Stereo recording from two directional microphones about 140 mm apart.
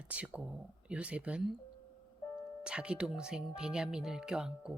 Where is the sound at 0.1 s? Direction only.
10° right (ahead or behind).